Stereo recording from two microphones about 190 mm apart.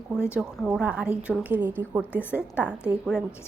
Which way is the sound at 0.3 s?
5° right (ahead or behind).